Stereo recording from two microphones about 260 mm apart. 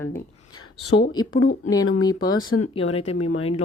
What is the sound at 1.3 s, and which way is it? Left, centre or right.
Speech, left.